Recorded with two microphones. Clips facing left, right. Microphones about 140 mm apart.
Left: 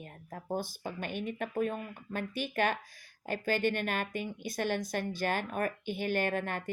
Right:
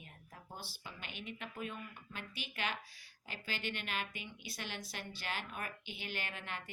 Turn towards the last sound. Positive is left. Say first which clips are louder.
# left 13 dB
turn(degrees=50)  # may be behind; listen again after turning